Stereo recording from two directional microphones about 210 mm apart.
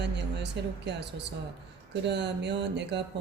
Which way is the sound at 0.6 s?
55° right (ahead or behind).